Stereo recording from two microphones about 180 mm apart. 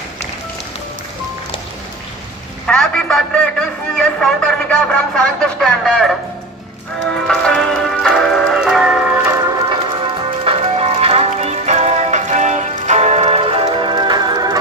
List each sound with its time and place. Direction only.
2.6 s a man's voice: 5° left (ahead or behind)
7.2 s music: 5° left (ahead or behind)
10.4 s music: 35° right (ahead or behind)